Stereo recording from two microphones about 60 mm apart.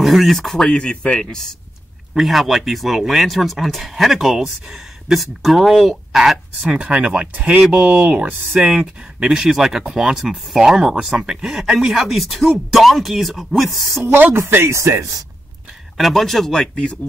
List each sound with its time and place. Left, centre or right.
0.0 s speech: centre
2.1 s speech: centre
6.6 s speech: right; by 14.0 s centre
14.0 s speech: right
14.7 s speech: right
16.0 s speech: centre